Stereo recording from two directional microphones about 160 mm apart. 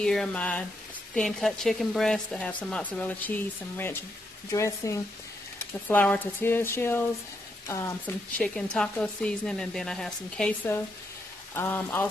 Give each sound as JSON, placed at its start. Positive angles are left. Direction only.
{"t": 0.0, "sound": "speech", "side_deg": 5}
{"t": 8.4, "sound": "speech", "side_deg": 5}